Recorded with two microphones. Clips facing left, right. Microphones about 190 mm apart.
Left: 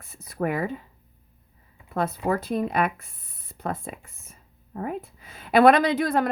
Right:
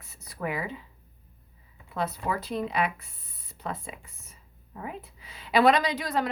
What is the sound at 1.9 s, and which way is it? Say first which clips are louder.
Speech: left 5 dB; 50° left (ahead or behind).